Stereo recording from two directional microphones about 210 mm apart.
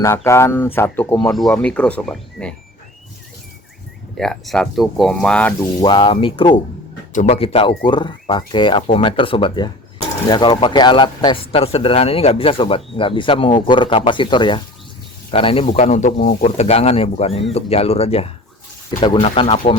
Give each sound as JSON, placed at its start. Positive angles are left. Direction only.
{"t": 0.3, "sound": "speech", "side_deg": 10}
{"t": 4.2, "sound": "speech", "side_deg": 0}
{"t": 5.8, "sound": "speech", "side_deg": 20}